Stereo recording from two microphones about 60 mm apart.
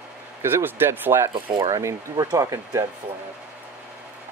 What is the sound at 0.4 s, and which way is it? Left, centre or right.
Speech, right.